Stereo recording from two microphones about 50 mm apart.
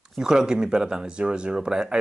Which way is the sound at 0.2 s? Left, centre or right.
Centre.